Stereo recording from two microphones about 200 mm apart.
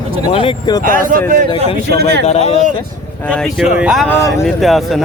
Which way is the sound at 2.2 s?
30° left (ahead or behind).